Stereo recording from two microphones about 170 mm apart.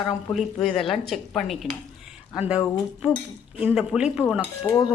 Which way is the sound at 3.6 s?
5° right (ahead or behind).